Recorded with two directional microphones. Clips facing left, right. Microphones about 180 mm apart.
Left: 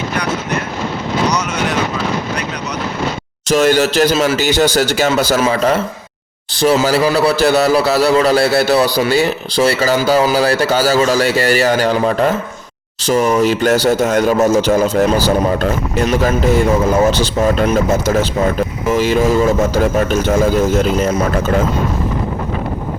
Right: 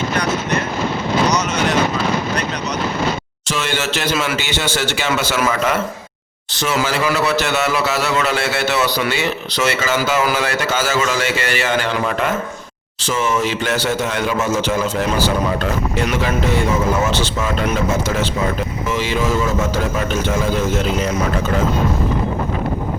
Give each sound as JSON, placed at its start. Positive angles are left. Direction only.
{"t": 3.5, "sound": "a man's voice", "side_deg": 40}
{"t": 17.0, "sound": "a man's voice", "side_deg": 35}